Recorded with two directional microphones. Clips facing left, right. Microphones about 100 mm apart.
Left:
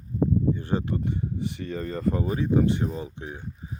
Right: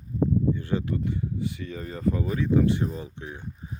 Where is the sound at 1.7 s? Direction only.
50° left (ahead or behind).